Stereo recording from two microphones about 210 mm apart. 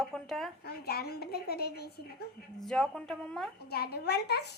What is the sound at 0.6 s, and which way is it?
A woman's voice, 50° left (ahead or behind).